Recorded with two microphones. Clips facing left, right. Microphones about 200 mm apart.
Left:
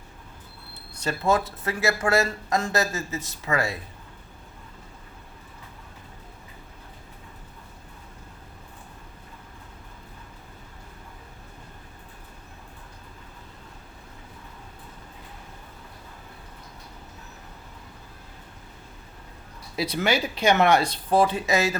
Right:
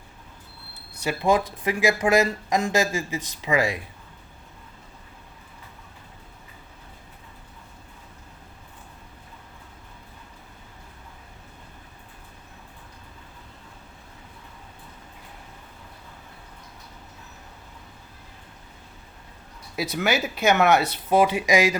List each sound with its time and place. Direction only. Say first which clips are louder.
1.0 s speech: right 2 dB; 15° right (ahead or behind)
19.7 s speech: even; 5° right (ahead or behind)